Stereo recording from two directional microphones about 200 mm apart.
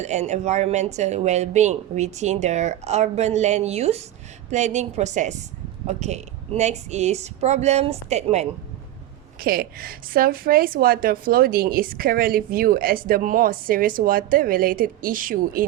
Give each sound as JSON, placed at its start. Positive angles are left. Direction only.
{"t": 0.0, "sound": "speech", "side_deg": -35}
{"t": 9.4, "sound": "a woman's voice", "side_deg": -45}